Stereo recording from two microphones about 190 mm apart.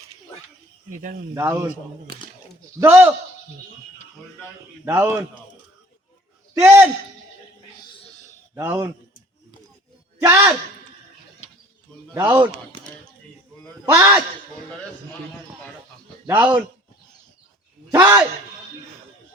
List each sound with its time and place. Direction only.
1.3 s a man's voice: 15° right (ahead or behind)
2.8 s a man's voice: 15° right (ahead or behind)
4.9 s a man's voice: 15° right (ahead or behind)
6.5 s a man's voice: 15° right (ahead or behind)
8.5 s a man's voice: 10° right (ahead or behind)
10.2 s a man's voice: 15° right (ahead or behind)
12.1 s speech: 20° right (ahead or behind)
13.8 s a man's voice: 15° right (ahead or behind)
16.2 s a man's voice: 10° right (ahead or behind)
17.9 s a man's voice: 15° right (ahead or behind)